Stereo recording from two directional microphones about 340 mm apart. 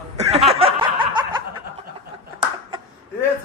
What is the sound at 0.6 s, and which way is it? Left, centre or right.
Snicker, centre.